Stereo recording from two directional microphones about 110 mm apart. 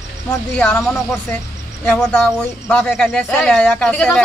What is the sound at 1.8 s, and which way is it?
Speech, 15° left (ahead or behind).